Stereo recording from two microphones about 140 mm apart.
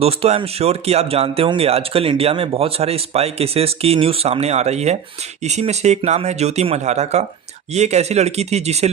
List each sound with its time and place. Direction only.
0.0 s speech: 45° right (ahead or behind)